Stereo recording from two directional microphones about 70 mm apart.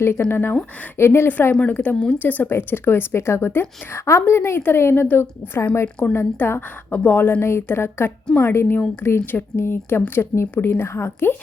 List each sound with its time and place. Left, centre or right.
0.0 s a woman's voice: left
1.3 s a woman's voice: left